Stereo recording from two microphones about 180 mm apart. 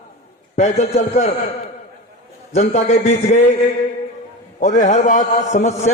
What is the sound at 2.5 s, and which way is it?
Speech, 35° left (ahead or behind).